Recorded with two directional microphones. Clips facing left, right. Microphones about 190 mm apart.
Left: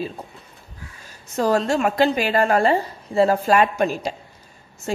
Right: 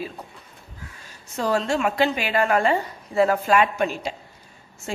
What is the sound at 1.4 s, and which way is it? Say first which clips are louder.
A woman's voice: left 3 dB; 40° left (ahead or behind).